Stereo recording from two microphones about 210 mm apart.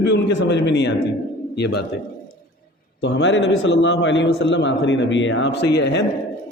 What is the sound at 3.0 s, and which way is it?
A man's voice, 55° left (ahead or behind).